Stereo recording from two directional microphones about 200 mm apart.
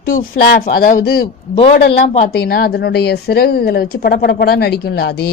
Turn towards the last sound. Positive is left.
turn(degrees=55)  # may be behind; listen again after turning